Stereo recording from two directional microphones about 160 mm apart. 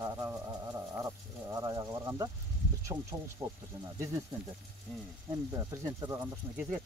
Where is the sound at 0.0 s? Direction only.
20° right (ahead or behind).